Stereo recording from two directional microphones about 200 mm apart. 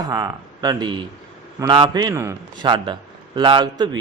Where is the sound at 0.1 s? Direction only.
20° right (ahead or behind).